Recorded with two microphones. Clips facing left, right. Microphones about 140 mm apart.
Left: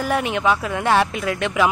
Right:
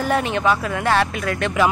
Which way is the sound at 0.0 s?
10° left (ahead or behind).